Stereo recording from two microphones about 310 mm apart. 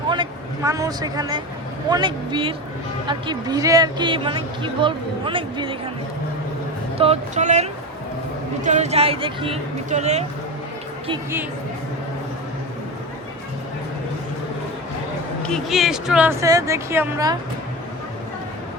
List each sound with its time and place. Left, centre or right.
0.1 s speech: centre
7.0 s speech: right
11.1 s speech: centre
15.4 s a woman's voice: centre